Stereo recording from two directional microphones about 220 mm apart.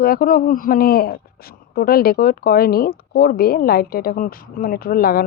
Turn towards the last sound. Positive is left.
turn(degrees=45)  # may be behind; listen again after turning